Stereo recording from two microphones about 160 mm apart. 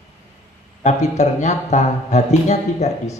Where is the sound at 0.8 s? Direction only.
45° left (ahead or behind).